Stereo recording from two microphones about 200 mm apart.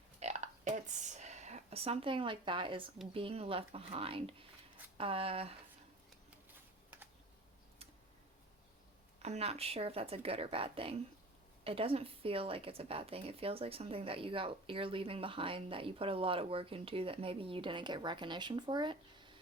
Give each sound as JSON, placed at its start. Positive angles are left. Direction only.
{"t": 0.2, "sound": "a sound", "side_deg": -35}
{"t": 3.1, "sound": "speech", "side_deg": -25}
{"t": 9.2, "sound": "speech", "side_deg": -30}